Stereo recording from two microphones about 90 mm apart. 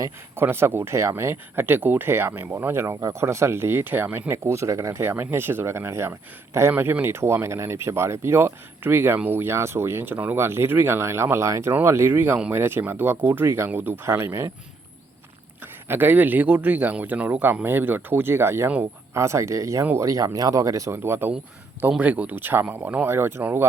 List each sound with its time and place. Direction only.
0.3 s speech: 25° right (ahead or behind)
15.6 s speech: 20° right (ahead or behind)